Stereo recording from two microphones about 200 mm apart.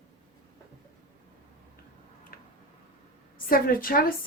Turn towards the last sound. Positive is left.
turn(degrees=45)  # may be behind; listen again after turning